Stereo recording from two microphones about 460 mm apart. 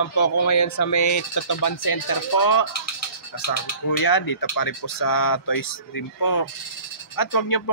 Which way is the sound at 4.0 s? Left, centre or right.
Left.